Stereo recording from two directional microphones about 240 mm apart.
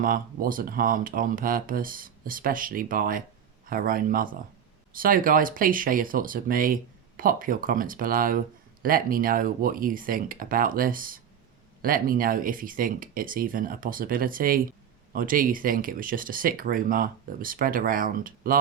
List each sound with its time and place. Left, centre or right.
0.0 s speech: right